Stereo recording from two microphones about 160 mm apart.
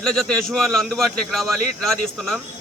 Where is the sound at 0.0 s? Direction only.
5° left (ahead or behind).